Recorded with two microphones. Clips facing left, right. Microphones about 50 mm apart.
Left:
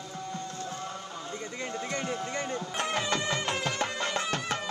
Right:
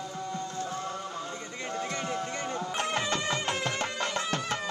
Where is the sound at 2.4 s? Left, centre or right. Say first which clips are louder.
Right 1 dB; right.